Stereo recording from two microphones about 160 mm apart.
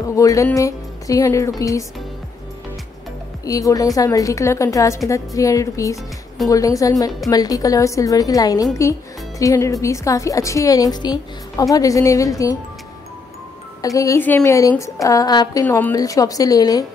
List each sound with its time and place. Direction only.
0.1 s a woman's voice: 20° left (ahead or behind)
0.6 s music: 20° left (ahead or behind)
1.6 s a woman's voice: 20° left (ahead or behind)
3.4 s a woman's voice: 20° left (ahead or behind)
13.7 s a woman's voice: 20° left (ahead or behind)